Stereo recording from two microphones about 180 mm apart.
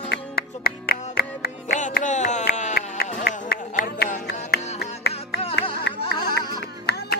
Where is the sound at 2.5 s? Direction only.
40° left (ahead or behind).